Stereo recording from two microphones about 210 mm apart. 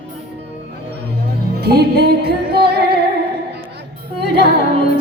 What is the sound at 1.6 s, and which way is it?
Music, 50° right (ahead or behind).